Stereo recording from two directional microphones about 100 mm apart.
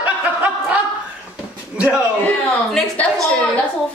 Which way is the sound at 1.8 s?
15° right (ahead or behind).